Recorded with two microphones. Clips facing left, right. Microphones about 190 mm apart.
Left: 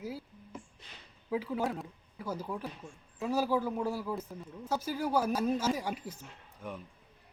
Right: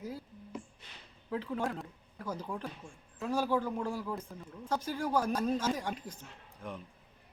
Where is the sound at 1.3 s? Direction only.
5° left (ahead or behind).